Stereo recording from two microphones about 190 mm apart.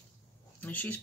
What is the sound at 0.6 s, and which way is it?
Speech, 10° left (ahead or behind).